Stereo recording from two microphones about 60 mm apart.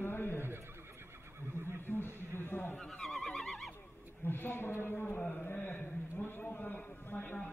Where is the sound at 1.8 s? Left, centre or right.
Left.